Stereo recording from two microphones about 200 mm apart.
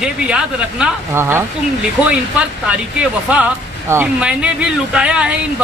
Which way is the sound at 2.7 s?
5° right (ahead or behind).